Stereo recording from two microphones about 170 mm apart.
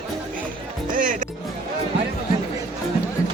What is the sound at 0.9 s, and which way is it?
Music, 50° right (ahead or behind).